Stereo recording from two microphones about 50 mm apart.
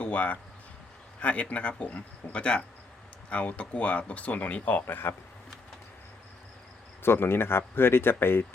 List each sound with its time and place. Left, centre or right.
0.0 s a sound: left
1.2 s speech: left
4.9 s speech: left
7.0 s speech: left